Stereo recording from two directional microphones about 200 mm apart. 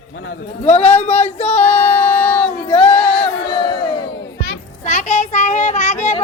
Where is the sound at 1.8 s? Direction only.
30° left (ahead or behind).